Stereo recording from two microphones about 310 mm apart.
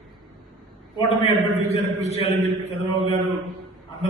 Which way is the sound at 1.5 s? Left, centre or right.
Right.